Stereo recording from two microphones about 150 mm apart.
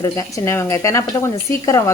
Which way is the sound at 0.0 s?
20° left (ahead or behind).